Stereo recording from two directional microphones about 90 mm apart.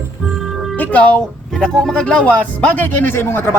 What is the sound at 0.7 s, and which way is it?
Speech, 20° left (ahead or behind).